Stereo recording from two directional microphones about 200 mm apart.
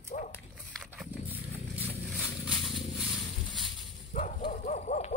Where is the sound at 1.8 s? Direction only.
Centre (ahead or behind).